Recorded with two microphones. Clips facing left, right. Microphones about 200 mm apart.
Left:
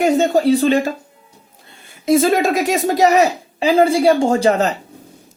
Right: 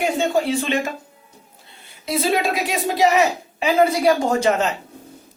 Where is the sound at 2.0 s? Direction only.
45° left (ahead or behind).